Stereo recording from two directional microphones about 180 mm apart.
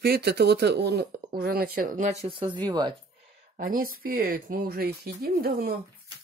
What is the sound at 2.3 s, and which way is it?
Speech, 30° right (ahead or behind).